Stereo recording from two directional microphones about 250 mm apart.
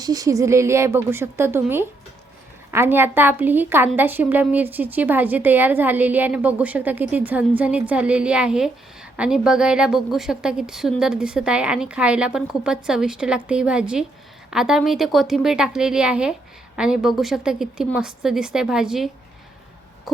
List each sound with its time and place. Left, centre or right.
0.0 s a woman's voice: centre